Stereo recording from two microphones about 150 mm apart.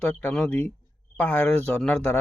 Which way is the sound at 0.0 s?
10° left (ahead or behind).